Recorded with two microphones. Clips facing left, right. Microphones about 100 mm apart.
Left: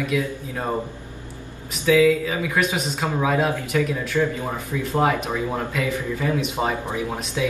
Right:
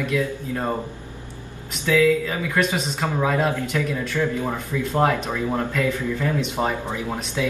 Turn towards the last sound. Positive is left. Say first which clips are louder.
# even
turn(degrees=15)  # may be behind; listen again after turning